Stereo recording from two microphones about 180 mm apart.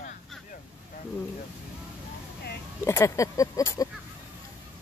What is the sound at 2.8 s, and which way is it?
Speech, 15° left (ahead or behind).